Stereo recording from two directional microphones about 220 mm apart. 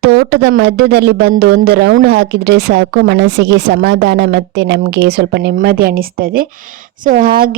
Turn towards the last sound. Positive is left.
turn(degrees=-40)  # may be behind; listen again after turning